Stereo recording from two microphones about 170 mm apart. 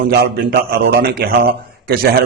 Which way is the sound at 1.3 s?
55° right (ahead or behind).